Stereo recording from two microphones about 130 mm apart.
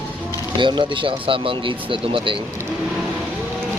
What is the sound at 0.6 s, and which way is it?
Speech, 40° right (ahead or behind).